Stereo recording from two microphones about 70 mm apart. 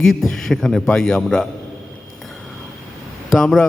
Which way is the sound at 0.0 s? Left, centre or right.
Centre.